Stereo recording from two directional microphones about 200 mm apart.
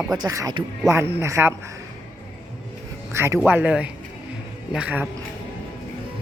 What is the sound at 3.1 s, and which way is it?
A man's voice, 15° right (ahead or behind).